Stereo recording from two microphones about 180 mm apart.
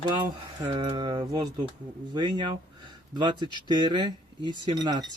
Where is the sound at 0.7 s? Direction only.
25° right (ahead or behind).